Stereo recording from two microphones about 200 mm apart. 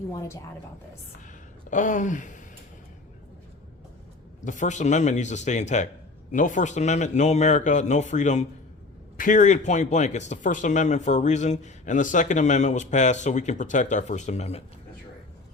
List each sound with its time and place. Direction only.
0.1 s speech: 15° left (ahead or behind)
1.7 s speech: 40° left (ahead or behind)
4.4 s speech: 40° left (ahead or behind)